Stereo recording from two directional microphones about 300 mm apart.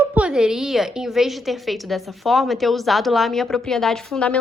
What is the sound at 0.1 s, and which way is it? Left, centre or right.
A woman's voice, centre.